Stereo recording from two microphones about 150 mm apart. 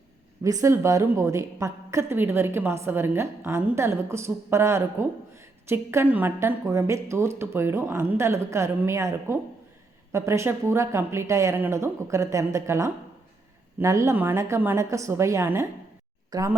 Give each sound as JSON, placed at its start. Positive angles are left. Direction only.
{"t": 0.4, "sound": "a woman's voice", "side_deg": -20}